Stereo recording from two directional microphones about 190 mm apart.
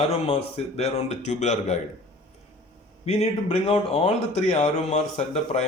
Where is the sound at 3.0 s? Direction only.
35° left (ahead or behind).